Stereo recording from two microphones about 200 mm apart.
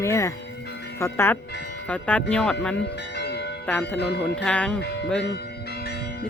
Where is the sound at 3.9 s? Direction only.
60° left (ahead or behind).